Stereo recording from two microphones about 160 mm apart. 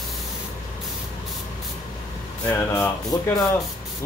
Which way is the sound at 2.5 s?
10° left (ahead or behind).